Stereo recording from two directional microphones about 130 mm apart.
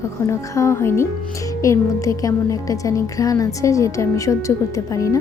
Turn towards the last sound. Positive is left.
turn(degrees=25)  # may be behind; listen again after turning